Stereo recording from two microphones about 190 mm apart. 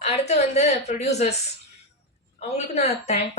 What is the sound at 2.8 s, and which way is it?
Speech, 35° left (ahead or behind).